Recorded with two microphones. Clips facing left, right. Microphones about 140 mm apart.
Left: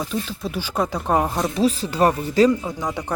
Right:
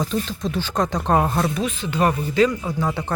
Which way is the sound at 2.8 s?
15° left (ahead or behind).